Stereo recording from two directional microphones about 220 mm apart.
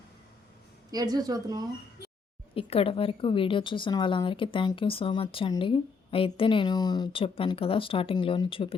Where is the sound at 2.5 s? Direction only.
25° left (ahead or behind).